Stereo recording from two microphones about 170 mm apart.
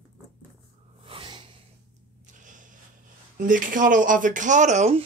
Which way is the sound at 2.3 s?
50° right (ahead or behind).